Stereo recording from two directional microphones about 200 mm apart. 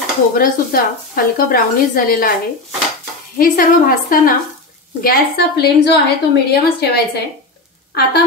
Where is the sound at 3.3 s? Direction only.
45° left (ahead or behind).